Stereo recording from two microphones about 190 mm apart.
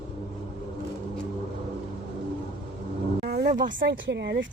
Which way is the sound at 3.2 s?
50° right (ahead or behind).